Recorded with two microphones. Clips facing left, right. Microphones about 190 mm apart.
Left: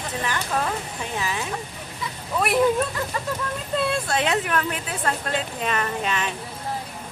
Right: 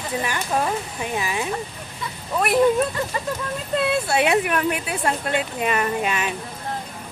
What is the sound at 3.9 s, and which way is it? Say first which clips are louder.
A woman's voice: right 6 dB; 10° right (ahead or behind).